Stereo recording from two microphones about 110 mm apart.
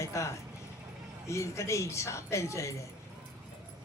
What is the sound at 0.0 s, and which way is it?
Vehicle, 25° left (ahead or behind).